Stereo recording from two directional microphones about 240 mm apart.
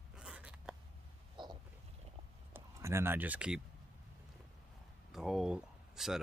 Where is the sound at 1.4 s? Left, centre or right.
Centre.